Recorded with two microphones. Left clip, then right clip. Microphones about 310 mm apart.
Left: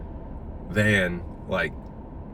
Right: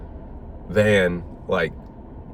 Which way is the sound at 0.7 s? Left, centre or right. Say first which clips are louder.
Right 5 dB; centre.